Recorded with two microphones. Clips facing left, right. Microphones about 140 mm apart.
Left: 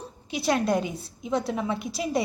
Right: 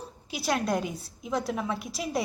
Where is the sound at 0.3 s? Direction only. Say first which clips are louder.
Left 4 dB; centre (ahead or behind).